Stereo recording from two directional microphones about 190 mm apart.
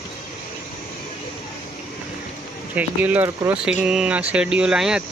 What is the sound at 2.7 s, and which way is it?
Speech, 10° right (ahead or behind).